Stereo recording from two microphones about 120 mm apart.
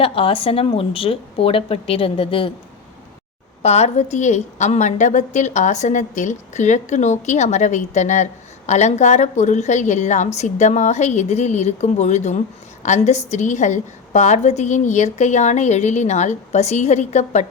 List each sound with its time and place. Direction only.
0.0 s a woman's voice: 50° left (ahead or behind)
3.6 s a woman's voice: 65° left (ahead or behind)